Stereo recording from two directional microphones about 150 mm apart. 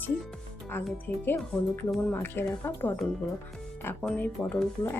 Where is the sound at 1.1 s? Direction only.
15° left (ahead or behind).